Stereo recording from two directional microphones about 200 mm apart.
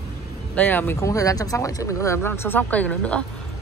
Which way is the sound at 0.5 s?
10° left (ahead or behind).